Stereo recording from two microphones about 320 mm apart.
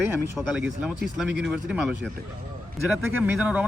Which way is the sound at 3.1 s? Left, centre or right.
Centre.